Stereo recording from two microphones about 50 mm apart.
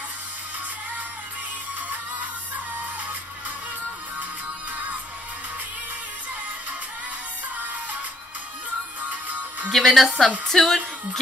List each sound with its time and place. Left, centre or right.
9.1 s music: right
9.7 s speech: centre